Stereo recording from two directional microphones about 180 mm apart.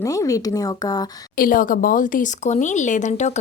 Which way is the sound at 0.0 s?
20° left (ahead or behind).